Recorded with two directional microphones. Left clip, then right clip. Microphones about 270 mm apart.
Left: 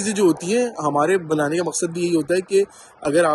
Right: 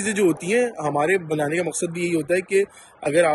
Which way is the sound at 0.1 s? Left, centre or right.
Centre.